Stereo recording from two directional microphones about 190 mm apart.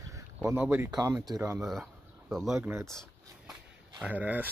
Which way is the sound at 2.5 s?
10° right (ahead or behind).